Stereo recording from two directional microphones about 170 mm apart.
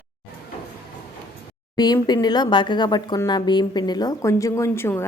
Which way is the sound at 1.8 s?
25° left (ahead or behind).